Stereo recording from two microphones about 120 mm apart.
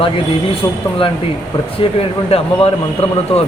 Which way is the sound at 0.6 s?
30° left (ahead or behind).